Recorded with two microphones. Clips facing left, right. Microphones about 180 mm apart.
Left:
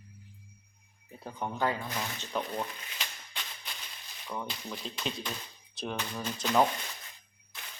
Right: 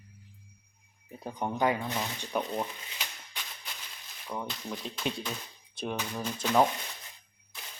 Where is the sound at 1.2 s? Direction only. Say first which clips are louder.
Right 3 dB; 15° right (ahead or behind).